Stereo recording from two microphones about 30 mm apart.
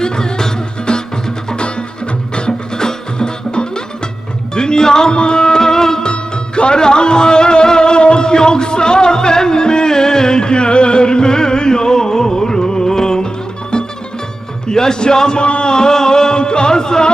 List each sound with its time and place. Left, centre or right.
0.0 s music: left
2.3 s music: left
6.0 s music: left
15.4 s speech: left
15.7 s a sound: left